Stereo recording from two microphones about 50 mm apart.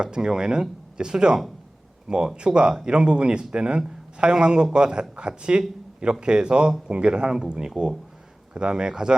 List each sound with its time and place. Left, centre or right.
0.0 s speech: centre